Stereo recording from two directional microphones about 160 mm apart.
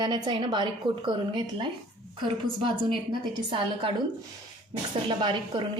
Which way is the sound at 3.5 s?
30° right (ahead or behind).